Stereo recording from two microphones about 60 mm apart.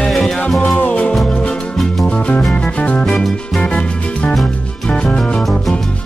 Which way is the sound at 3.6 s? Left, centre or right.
Centre.